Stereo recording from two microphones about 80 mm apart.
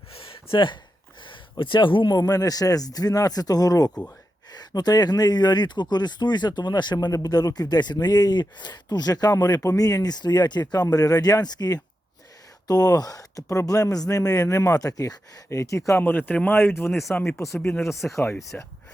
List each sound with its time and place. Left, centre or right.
0.2 s a sound: left
2.1 s speech: left
7.1 s speech: left
16.0 s speech: left
17.9 s speech: centre
18.5 s speech: centre